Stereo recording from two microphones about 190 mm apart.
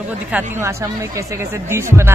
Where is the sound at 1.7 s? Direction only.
15° right (ahead or behind).